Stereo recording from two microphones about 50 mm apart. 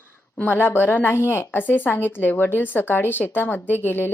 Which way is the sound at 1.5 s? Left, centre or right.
Left.